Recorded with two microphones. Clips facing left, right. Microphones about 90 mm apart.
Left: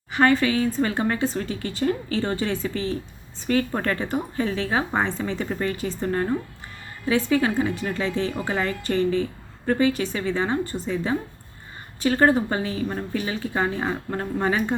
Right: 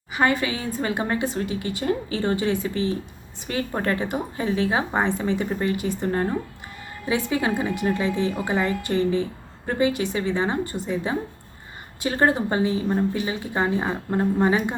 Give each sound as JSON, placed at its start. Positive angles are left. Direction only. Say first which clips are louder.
{"t": 0.1, "sound": "a woman's voice", "louder": "left 3 dB", "side_deg": -15}